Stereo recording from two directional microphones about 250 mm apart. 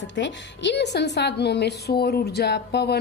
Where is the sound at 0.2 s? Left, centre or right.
Left.